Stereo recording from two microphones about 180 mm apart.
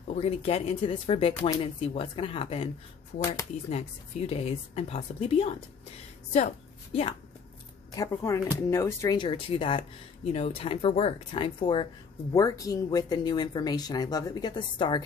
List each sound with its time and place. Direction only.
0.1 s a woman's voice: 35° left (ahead or behind)
3.7 s a woman's voice: 35° left (ahead or behind)
7.9 s speech: 15° left (ahead or behind)
9.2 s speech: 30° left (ahead or behind)